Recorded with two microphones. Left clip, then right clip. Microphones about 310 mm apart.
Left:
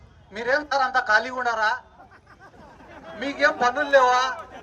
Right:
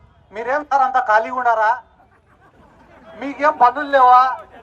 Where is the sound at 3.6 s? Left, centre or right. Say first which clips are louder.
Right 7 dB; centre.